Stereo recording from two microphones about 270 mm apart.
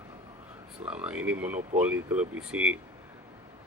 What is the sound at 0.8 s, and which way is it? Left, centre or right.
Speech, centre.